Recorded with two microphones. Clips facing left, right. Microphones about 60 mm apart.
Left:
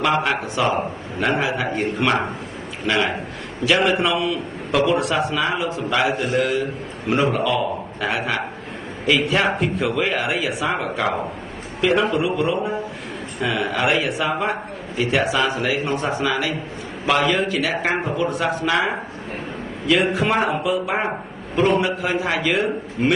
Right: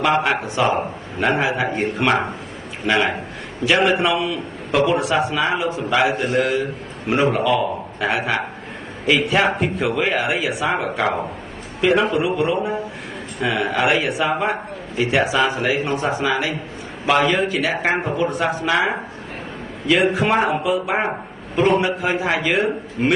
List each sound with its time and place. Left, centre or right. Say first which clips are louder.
0.2 s a man's voice: right 2 dB; centre
3.6 s a man's voice: right 1 dB; centre
6.1 s a man's voice: right 1 dB; right
7.2 s a man's voice: right 2 dB; centre